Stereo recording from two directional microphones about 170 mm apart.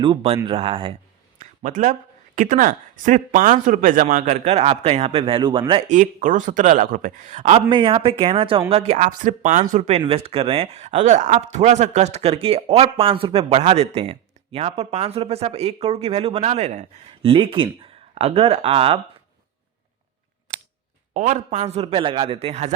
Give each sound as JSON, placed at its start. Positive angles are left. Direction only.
{"t": 0.0, "sound": "speech", "side_deg": -30}
{"t": 1.4, "sound": "speech", "side_deg": -50}
{"t": 4.4, "sound": "speech", "side_deg": -40}
{"t": 5.9, "sound": "speech", "side_deg": -50}
{"t": 7.7, "sound": "speech", "side_deg": -30}
{"t": 21.1, "sound": "speech", "side_deg": -45}